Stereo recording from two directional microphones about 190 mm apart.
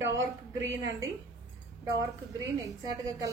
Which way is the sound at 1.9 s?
20° right (ahead or behind).